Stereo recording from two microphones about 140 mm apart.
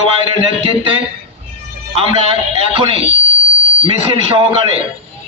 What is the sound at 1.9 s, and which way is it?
A man's voice, 45° right (ahead or behind).